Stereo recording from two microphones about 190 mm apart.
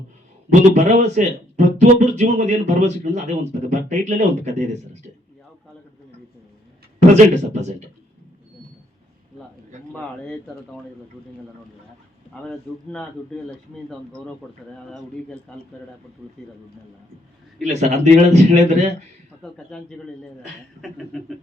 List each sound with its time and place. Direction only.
0.7 s speech: 35° right (ahead or behind)
7.1 s speech: 35° right (ahead or behind)
9.9 s speech: 5° left (ahead or behind)
12.3 s speech: 5° left (ahead or behind)
14.1 s speech: 5° left (ahead or behind)
17.7 s speech: 35° right (ahead or behind)
19.4 s speech: 5° left (ahead or behind)
20.8 s speech: centre (ahead or behind)